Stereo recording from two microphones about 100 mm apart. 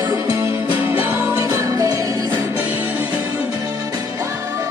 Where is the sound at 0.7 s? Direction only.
20° right (ahead or behind).